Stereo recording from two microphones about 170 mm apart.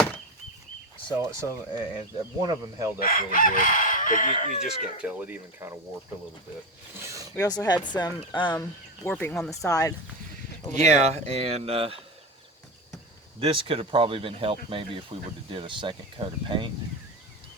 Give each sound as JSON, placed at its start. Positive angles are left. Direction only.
{"t": 1.2, "sound": "speech", "side_deg": -15}
{"t": 3.0, "sound": "chicken", "side_deg": 55}
{"t": 5.0, "sound": "speech", "side_deg": -10}
{"t": 6.9, "sound": "speech", "side_deg": -15}
{"t": 7.3, "sound": "speech", "side_deg": 20}
{"t": 9.0, "sound": "speech", "side_deg": 10}
{"t": 9.6, "sound": "speech", "side_deg": 20}
{"t": 10.8, "sound": "speech", "side_deg": -40}
{"t": 13.4, "sound": "speech", "side_deg": -30}